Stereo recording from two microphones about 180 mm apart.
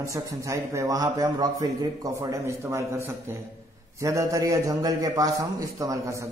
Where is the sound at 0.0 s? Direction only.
15° right (ahead or behind).